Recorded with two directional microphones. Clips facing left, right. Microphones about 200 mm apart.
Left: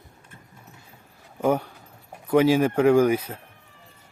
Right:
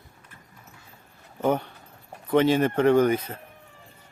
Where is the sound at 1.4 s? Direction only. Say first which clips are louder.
Left 2 dB; 10° left (ahead or behind).